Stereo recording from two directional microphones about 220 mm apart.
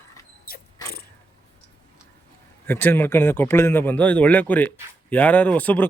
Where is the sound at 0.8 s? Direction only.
20° left (ahead or behind).